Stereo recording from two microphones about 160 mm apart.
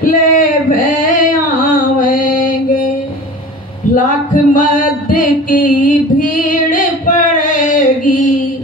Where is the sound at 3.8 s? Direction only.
55° left (ahead or behind).